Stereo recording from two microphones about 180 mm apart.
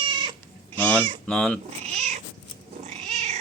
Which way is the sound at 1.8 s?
40° right (ahead or behind).